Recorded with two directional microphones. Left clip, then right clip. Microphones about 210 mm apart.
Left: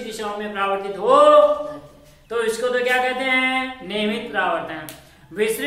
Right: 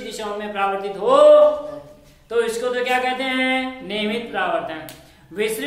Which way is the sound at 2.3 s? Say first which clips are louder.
Even; 15° right (ahead or behind).